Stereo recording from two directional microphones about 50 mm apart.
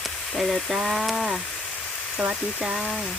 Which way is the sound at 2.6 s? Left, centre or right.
Centre.